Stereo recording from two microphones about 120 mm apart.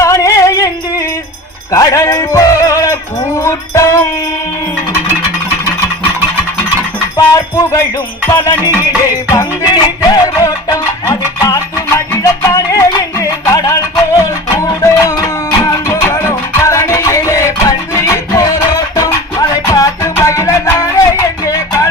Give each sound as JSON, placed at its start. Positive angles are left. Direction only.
{"t": 0.0, "sound": "music", "side_deg": 25}
{"t": 7.2, "sound": "music", "side_deg": 30}